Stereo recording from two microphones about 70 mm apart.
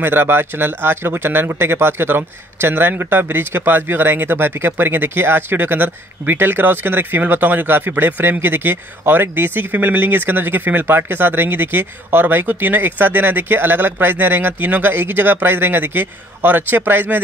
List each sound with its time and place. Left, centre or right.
0.0 s speech: right